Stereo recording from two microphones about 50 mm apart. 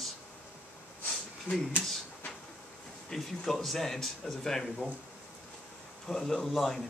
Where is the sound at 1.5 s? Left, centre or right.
Left.